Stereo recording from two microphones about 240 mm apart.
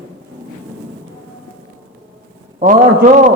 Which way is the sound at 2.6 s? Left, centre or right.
Right.